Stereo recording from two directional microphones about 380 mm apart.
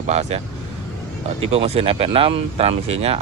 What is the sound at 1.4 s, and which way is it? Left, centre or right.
Speech, centre.